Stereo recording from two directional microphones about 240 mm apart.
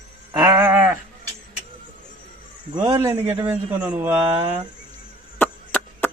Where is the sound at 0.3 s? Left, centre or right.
Centre.